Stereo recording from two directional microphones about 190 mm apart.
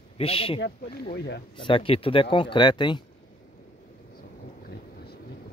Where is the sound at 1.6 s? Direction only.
25° left (ahead or behind).